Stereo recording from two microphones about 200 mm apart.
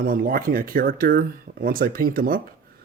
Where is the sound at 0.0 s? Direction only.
45° right (ahead or behind).